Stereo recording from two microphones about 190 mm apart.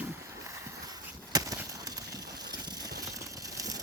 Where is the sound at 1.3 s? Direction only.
20° right (ahead or behind).